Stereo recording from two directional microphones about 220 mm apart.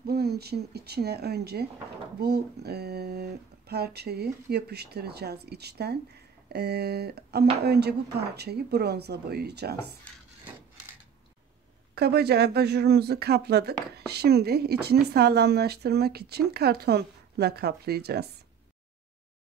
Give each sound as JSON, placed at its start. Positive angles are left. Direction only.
{"t": 0.0, "sound": "speech", "side_deg": -45}
{"t": 11.9, "sound": "speech", "side_deg": -45}